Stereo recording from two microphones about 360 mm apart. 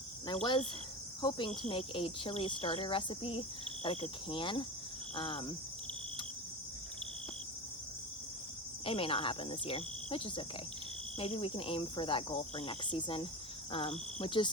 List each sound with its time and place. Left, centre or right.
0.4 s cricket: centre
8.8 s cricket: centre